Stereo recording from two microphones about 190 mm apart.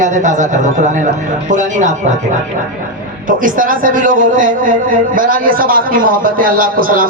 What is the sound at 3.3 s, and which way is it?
A man's voice, 45° right (ahead or behind).